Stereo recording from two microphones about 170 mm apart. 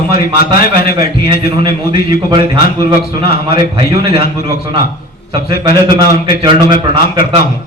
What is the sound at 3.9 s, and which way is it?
Speech, 65° left (ahead or behind).